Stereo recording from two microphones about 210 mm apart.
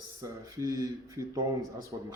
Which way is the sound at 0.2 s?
15° right (ahead or behind).